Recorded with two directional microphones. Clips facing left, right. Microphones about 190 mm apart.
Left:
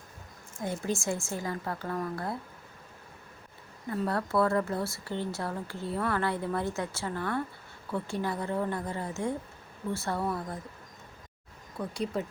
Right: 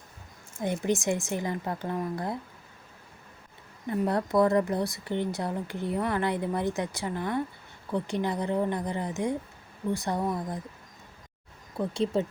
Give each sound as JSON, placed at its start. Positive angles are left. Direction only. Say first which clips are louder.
{"t": 0.6, "sound": "speech", "louder": "right 4 dB", "side_deg": -20}
{"t": 3.8, "sound": "speech", "louder": "right 3 dB", "side_deg": -20}
{"t": 11.8, "sound": "speech", "louder": "right 5 dB", "side_deg": -25}